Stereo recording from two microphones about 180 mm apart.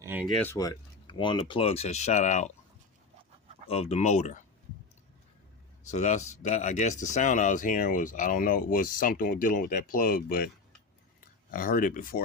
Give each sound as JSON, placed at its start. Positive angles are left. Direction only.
{"t": 0.0, "sound": "a sound", "side_deg": -10}
{"t": 0.5, "sound": "speech", "side_deg": 20}
{"t": 3.7, "sound": "speech", "side_deg": 35}
{"t": 5.9, "sound": "speech", "side_deg": 40}